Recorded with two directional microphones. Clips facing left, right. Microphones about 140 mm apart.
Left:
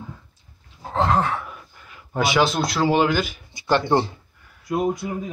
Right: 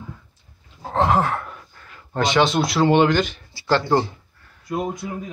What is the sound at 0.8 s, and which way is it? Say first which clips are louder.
Speech: right 2 dB; 5° right (ahead or behind).